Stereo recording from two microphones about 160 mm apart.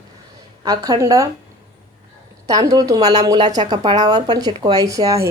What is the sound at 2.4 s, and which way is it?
A woman's voice, 25° right (ahead or behind).